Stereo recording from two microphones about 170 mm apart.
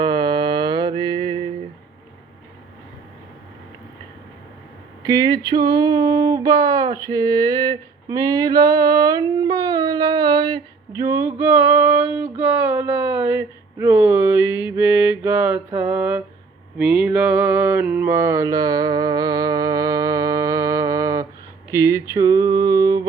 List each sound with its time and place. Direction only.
0.0 s mantra: 25° right (ahead or behind)
5.0 s a sound: 25° right (ahead or behind)
16.7 s mantra: 5° right (ahead or behind); by 23.0 s 20° right (ahead or behind)